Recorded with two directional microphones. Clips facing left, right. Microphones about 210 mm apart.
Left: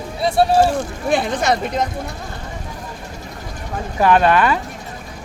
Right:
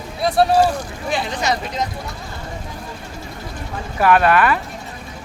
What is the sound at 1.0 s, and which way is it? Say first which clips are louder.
Speech: left 4 dB; 55° left (ahead or behind).